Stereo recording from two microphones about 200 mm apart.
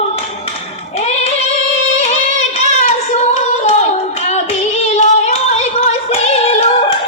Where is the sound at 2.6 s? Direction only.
35° left (ahead or behind).